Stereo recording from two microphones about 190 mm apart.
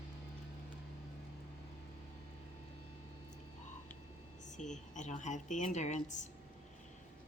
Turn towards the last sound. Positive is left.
turn(degrees=35)  # may be behind; listen again after turning